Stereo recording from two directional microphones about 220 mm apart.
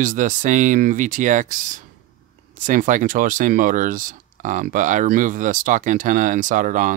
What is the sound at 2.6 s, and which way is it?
Speech, 35° right (ahead or behind).